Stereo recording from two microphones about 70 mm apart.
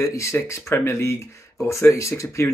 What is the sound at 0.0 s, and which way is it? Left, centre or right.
Speech, left.